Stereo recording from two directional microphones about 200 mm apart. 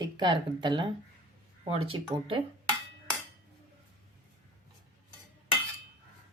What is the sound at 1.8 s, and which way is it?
Speech, 25° right (ahead or behind).